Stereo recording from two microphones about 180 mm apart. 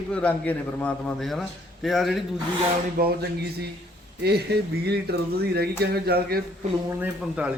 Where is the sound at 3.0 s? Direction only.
60° right (ahead or behind).